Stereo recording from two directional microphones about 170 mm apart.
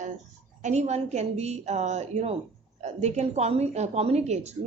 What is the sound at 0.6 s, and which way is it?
A woman's voice, 45° right (ahead or behind).